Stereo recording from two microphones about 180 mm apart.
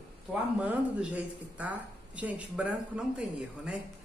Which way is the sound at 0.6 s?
5° right (ahead or behind).